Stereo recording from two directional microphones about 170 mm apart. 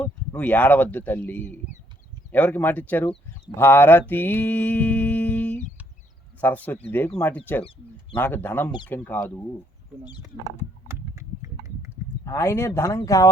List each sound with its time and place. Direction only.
0.0 s mantra: 10° left (ahead or behind)
10.8 s a sound: 15° right (ahead or behind)
12.2 s mantra: 15° left (ahead or behind)